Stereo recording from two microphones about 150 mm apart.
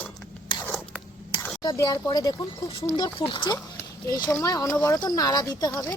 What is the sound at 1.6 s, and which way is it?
Speech, 25° left (ahead or behind).